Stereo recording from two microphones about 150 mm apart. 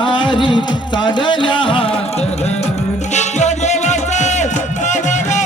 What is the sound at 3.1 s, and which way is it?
Music, 50° left (ahead or behind).